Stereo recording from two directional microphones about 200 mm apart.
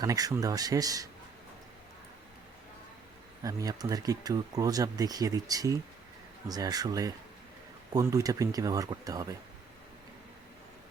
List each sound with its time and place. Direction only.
0.0 s speech: 20° right (ahead or behind)
3.4 s speech: 20° right (ahead or behind)